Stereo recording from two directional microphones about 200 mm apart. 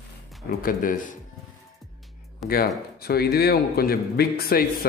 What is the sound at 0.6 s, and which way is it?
Speech, 45° left (ahead or behind).